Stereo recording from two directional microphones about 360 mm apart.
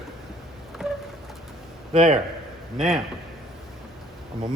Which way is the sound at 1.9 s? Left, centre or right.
Centre.